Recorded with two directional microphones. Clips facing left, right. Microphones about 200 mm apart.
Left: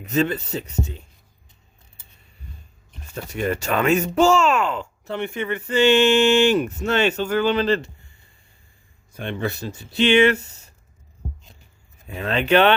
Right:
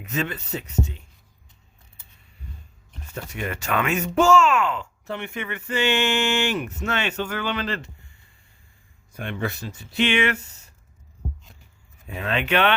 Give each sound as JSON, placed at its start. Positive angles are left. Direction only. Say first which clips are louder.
{"t": 0.0, "sound": "speech", "louder": "left 7 dB", "side_deg": 35}
{"t": 3.2, "sound": "speech", "louder": "left 6 dB", "side_deg": 35}
{"t": 9.1, "sound": "speech", "louder": "left 2 dB", "side_deg": 30}
{"t": 12.4, "sound": "speech", "louder": "left 6 dB", "side_deg": 35}